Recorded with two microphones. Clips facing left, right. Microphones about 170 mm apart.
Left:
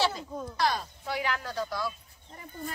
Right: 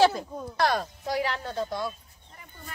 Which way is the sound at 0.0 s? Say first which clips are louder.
Right 7 dB; 55° right (ahead or behind).